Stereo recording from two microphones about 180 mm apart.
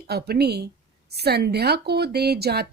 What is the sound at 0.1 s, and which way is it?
A woman's voice, 60° right (ahead or behind).